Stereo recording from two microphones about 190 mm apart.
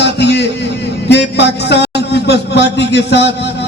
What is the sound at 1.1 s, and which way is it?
A man's voice, 65° left (ahead or behind).